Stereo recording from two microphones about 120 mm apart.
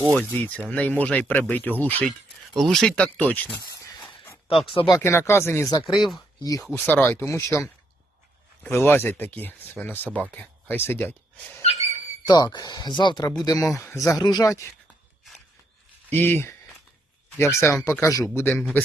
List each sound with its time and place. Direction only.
0.2 s speech: 15° left (ahead or behind)
2.0 s speech: centre (ahead or behind)
3.5 s a sound: 35° left (ahead or behind)
4.6 s speech: 50° left (ahead or behind)
4.9 s speech: 25° left (ahead or behind)
5.8 s speech: centre (ahead or behind)
6.4 s speech: 30° left (ahead or behind)
6.7 s speech: 20° left (ahead or behind)
8.7 s speech: 20° left (ahead or behind)
11.6 s a sound: 60° left (ahead or behind)
12.2 s speech: 35° left (ahead or behind)
16.0 s speech: 15° left (ahead or behind)